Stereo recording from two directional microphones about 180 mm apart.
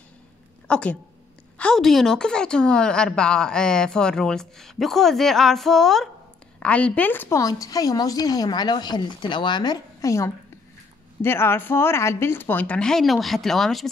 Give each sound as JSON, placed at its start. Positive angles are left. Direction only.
{"t": 0.7, "sound": "a woman's voice", "side_deg": 5}